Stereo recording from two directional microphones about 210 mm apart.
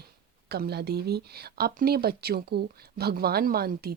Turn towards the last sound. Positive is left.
turn(degrees=-45)  # may be behind; listen again after turning